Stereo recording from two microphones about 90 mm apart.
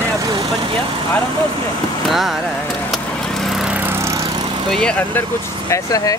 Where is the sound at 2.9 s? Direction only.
Centre (ahead or behind).